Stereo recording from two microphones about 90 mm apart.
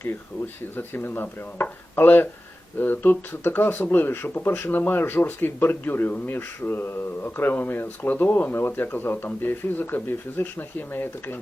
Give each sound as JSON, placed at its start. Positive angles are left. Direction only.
{"t": 0.0, "sound": "speech", "side_deg": 25}